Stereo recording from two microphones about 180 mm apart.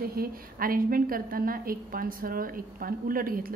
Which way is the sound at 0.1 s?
55° right (ahead or behind).